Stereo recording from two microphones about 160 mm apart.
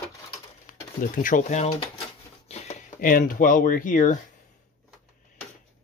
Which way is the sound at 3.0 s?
60° left (ahead or behind).